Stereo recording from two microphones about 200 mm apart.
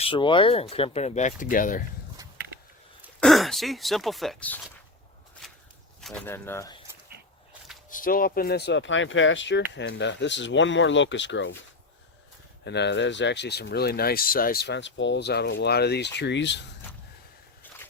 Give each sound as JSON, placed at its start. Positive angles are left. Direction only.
{"t": 0.0, "sound": "speech", "side_deg": 25}
{"t": 3.2, "sound": "speech", "side_deg": 0}
{"t": 6.0, "sound": "speech", "side_deg": 5}
{"t": 7.9, "sound": "speech", "side_deg": 45}
{"t": 12.6, "sound": "speech", "side_deg": 60}